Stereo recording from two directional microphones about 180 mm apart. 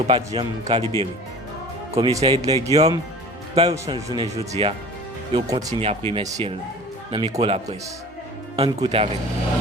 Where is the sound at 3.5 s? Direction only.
35° right (ahead or behind).